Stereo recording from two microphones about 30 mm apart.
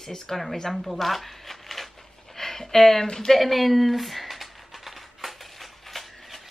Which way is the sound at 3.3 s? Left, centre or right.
Centre.